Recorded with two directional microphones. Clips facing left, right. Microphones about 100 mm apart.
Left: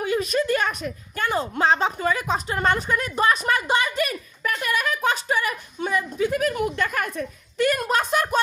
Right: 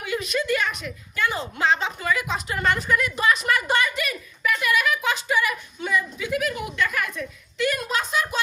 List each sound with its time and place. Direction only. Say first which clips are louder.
0.0 s a woman's voice: left 4 dB; 40° left (ahead or behind)